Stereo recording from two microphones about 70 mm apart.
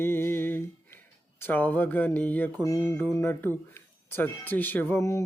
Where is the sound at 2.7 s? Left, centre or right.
Left.